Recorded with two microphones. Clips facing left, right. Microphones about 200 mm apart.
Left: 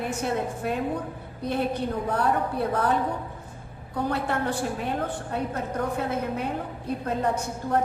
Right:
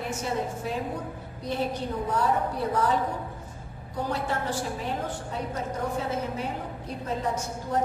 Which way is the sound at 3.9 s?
60° left (ahead or behind).